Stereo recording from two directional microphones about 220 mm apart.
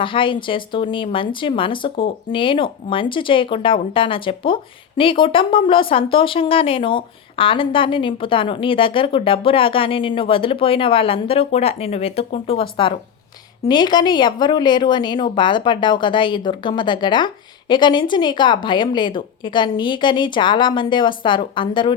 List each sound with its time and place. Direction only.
0.0 s speech: 25° left (ahead or behind)